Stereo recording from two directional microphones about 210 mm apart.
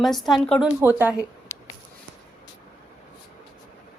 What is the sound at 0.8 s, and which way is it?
Speech, 10° right (ahead or behind).